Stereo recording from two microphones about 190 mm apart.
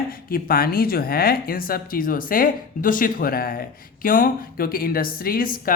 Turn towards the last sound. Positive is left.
turn(degrees=50)  # may be behind; listen again after turning